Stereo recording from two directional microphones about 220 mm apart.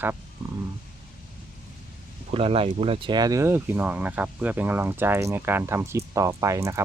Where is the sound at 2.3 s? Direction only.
25° right (ahead or behind).